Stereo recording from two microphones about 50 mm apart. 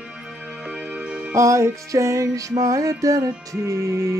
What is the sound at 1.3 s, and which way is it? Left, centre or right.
Music, right.